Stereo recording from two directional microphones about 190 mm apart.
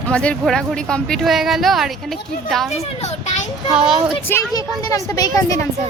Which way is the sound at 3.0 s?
35° left (ahead or behind).